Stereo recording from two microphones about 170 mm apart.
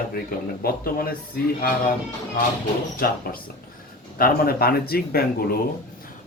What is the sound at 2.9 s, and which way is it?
Speech, 60° left (ahead or behind).